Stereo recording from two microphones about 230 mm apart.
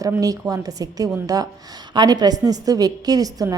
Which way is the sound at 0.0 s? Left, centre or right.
Centre.